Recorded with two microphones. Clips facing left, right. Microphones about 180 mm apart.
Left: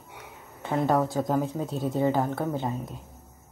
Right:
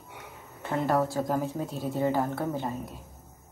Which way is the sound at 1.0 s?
20° left (ahead or behind).